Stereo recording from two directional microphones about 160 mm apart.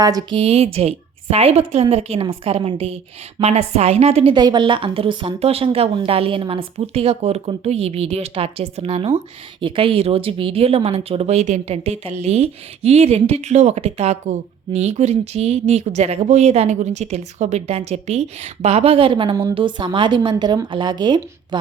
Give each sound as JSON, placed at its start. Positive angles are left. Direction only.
{"t": 0.0, "sound": "a woman's voice", "side_deg": -25}
{"t": 4.4, "sound": "a woman's voice", "side_deg": -30}